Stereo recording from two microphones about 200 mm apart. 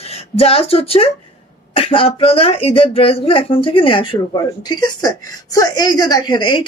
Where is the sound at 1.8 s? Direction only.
25° left (ahead or behind).